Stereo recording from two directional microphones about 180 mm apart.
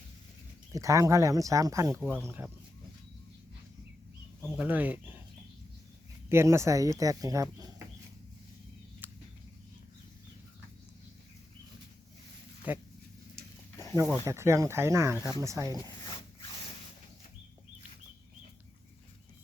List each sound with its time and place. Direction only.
0.7 s speech: 20° right (ahead or behind)
4.4 s speech: 10° right (ahead or behind)
6.2 s speech: 15° right (ahead or behind)
12.7 s speech: 10° right (ahead or behind)
14.3 s speech: 15° right (ahead or behind)